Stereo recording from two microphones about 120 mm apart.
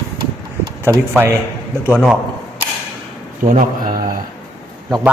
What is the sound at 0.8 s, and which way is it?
Speech, 20° right (ahead or behind).